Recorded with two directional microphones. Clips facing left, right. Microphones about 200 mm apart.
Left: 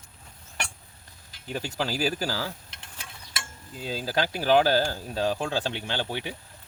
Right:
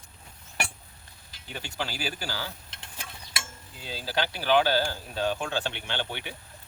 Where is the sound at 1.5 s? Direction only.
40° left (ahead or behind).